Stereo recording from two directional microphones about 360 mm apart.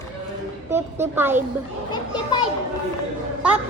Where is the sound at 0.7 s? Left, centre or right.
Centre.